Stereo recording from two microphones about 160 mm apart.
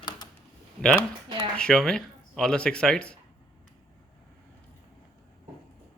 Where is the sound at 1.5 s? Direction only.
5° left (ahead or behind).